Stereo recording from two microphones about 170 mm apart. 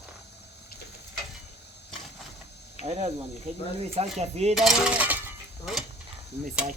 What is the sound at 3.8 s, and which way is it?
Speech, 40° right (ahead or behind).